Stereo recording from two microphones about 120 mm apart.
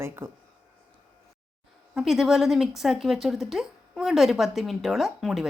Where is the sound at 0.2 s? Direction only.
20° right (ahead or behind).